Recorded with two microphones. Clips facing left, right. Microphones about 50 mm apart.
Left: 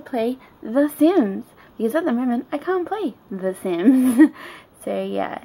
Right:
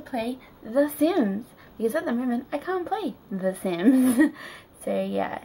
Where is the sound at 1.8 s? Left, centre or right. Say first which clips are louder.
Left 5 dB; left.